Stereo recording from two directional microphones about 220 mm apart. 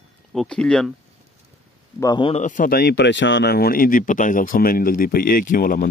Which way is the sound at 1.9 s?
20° left (ahead or behind).